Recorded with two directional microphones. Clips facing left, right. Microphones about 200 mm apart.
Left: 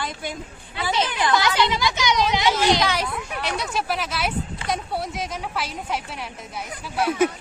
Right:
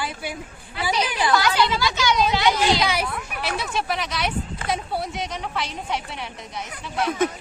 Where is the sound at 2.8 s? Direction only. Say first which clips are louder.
Even; 10° right (ahead or behind); by 7.3 s 10° left (ahead or behind).